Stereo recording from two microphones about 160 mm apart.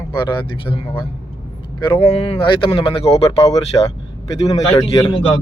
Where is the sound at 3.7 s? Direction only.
20° left (ahead or behind).